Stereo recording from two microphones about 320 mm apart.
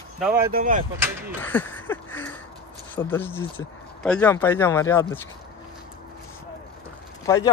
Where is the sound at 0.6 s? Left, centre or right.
Right.